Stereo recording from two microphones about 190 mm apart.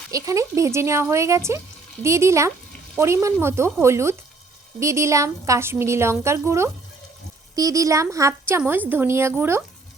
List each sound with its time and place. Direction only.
0.1 s a woman's voice: 15° right (ahead or behind)